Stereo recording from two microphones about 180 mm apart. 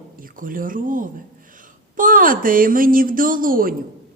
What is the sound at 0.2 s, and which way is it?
A woman's voice, 50° right (ahead or behind).